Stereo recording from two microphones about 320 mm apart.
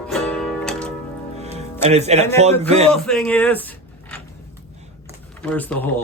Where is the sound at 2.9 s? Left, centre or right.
Centre.